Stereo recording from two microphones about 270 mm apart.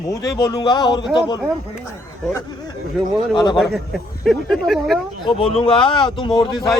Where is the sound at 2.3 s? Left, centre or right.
Centre.